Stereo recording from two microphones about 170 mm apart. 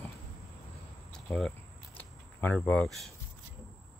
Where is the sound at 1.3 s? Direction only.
10° left (ahead or behind).